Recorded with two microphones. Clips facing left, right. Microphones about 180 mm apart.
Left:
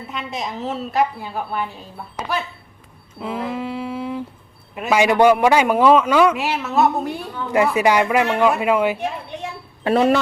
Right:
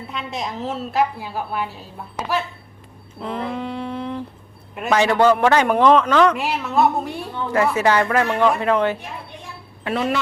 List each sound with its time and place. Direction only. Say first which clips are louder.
0.1 s a woman's voice: even; centre (ahead or behind)
3.2 s music: left 1 dB; 5° left (ahead or behind)
4.7 s a man's voice: left 1 dB; 5° left (ahead or behind)
7.5 s a man's voice: left 2 dB; 15° left (ahead or behind)
9.3 s a sound: left 9 dB; 75° left (ahead or behind)
9.8 s speech: left 6 dB; 40° left (ahead or behind)